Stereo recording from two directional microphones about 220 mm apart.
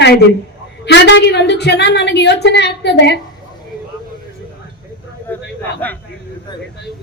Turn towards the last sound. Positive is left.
turn(degrees=5)  # may be behind; listen again after turning